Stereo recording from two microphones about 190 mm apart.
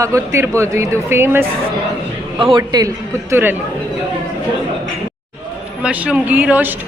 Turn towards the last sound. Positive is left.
turn(degrees=-10)  # may be behind; listen again after turning